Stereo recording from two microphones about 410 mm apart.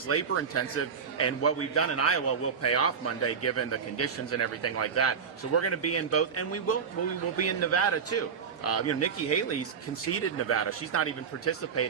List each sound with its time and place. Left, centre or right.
0.1 s a man's voice: left